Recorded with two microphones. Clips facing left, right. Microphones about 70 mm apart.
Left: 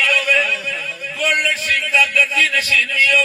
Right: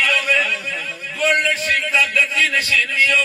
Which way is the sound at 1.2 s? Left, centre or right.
Right.